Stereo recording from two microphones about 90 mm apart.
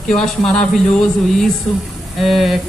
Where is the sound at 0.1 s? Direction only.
5° left (ahead or behind).